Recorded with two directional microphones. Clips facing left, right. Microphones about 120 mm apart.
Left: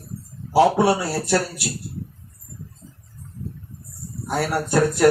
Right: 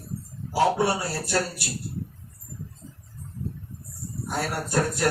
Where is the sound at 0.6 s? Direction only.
75° left (ahead or behind).